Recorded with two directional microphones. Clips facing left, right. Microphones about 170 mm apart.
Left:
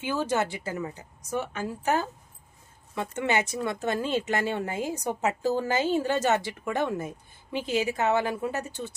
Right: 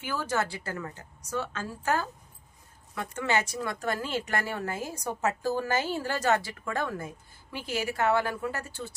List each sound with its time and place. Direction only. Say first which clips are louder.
0.0 s speech: left 3 dB; 20° left (ahead or behind)